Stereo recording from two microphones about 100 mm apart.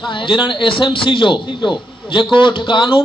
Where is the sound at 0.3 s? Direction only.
55° left (ahead or behind).